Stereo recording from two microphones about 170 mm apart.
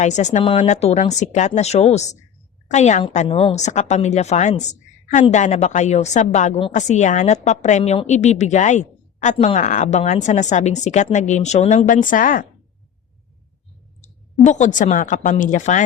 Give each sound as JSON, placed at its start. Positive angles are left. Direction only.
{"t": 0.0, "sound": "a woman's voice", "side_deg": 45}
{"t": 14.4, "sound": "speech", "side_deg": 45}